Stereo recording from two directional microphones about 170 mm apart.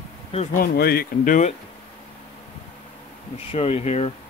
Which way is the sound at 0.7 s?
65° left (ahead or behind).